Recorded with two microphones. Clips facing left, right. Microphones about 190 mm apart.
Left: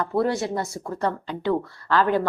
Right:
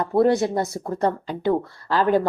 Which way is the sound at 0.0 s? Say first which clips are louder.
Right 4 dB; 30° right (ahead or behind).